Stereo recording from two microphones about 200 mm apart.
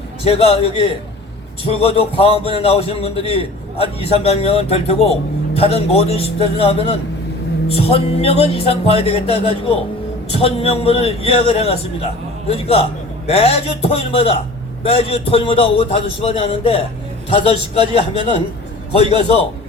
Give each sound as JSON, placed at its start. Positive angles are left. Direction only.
{"t": 0.3, "sound": "a man's voice", "side_deg": 30}